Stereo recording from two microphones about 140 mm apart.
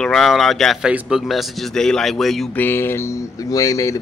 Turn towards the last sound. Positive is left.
turn(degrees=25)  # may be behind; listen again after turning